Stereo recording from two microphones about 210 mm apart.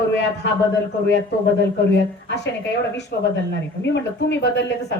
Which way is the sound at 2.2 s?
55° left (ahead or behind).